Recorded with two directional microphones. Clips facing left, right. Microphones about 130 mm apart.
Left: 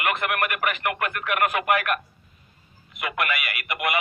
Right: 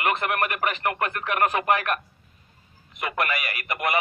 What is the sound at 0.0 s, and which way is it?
Speech, 35° right (ahead or behind).